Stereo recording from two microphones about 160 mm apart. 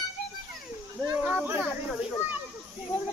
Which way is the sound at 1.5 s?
10° right (ahead or behind).